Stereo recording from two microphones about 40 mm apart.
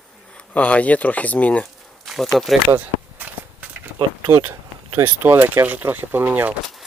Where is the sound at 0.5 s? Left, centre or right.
Left.